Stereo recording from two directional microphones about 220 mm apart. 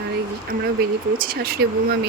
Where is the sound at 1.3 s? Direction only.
45° right (ahead or behind).